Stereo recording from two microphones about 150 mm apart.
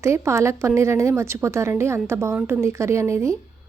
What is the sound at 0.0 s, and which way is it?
A woman's voice, 20° right (ahead or behind).